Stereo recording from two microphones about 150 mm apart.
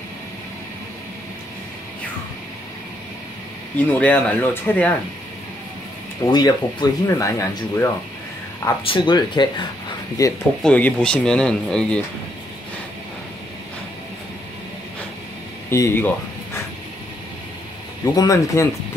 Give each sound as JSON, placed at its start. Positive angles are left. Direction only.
{"t": 3.7, "sound": "speech", "side_deg": 10}
{"t": 6.2, "sound": "speech", "side_deg": 25}
{"t": 8.8, "sound": "speech", "side_deg": 30}
{"t": 10.6, "sound": "speech", "side_deg": 5}
{"t": 15.7, "sound": "speech", "side_deg": 20}
{"t": 18.1, "sound": "speech", "side_deg": 20}